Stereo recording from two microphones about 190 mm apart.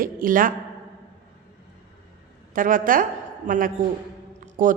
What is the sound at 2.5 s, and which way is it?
A woman's voice, 45° right (ahead or behind).